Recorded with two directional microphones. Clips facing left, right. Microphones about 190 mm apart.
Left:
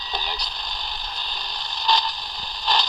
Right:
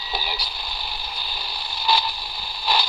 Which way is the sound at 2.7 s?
10° right (ahead or behind).